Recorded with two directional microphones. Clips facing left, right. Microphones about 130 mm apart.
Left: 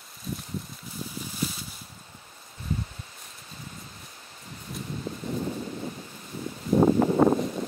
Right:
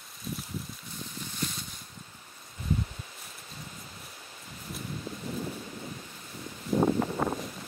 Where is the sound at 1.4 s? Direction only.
5° left (ahead or behind).